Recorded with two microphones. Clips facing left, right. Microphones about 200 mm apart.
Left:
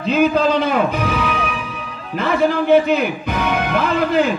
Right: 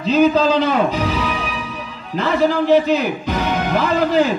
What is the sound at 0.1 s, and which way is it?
A man's voice, 55° left (ahead or behind).